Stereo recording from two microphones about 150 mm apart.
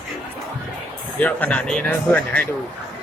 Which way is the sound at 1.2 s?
10° left (ahead or behind).